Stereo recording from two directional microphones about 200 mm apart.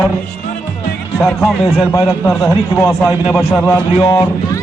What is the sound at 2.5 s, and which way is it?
Speech, 10° left (ahead or behind).